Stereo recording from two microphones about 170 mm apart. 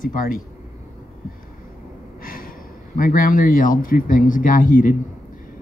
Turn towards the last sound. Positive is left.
turn(degrees=55)  # may be behind; listen again after turning